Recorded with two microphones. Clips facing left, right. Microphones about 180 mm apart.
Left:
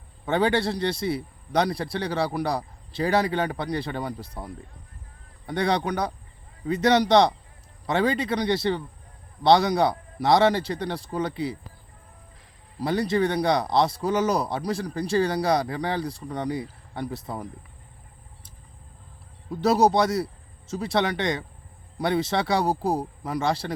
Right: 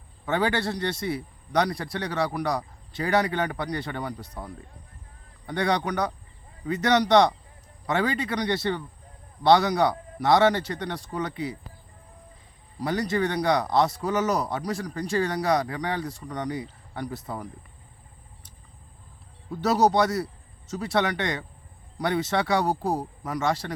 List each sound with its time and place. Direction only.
0.3 s speech: 30° left (ahead or behind)
12.8 s speech: 30° left (ahead or behind)
19.5 s speech: 30° left (ahead or behind)